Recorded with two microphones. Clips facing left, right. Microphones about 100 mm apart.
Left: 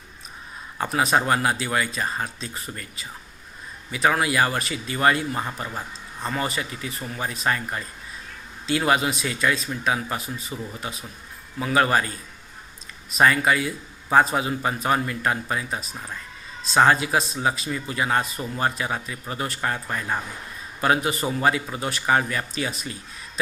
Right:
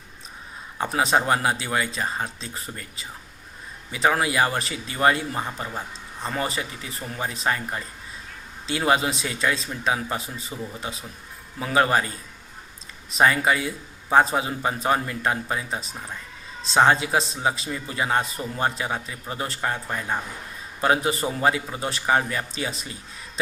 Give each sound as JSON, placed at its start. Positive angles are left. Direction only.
{"t": 0.8, "sound": "a man's voice", "side_deg": -25}